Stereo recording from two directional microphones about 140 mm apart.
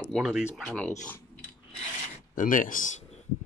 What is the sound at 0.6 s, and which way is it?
Speech, 5° left (ahead or behind).